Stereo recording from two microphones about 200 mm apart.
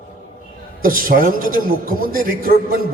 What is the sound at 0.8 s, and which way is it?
A man's voice, 45° right (ahead or behind).